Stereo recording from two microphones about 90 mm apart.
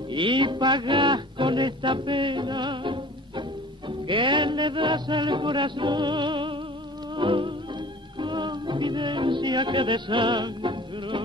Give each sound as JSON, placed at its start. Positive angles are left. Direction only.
{"t": 0.1, "sound": "music", "side_deg": -65}